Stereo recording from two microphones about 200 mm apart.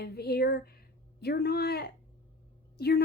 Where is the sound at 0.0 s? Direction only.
50° left (ahead or behind).